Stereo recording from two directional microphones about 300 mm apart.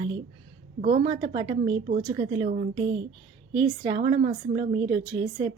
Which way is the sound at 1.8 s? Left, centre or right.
Right.